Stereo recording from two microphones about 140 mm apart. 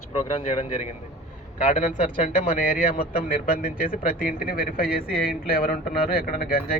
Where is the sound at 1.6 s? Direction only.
65° left (ahead or behind).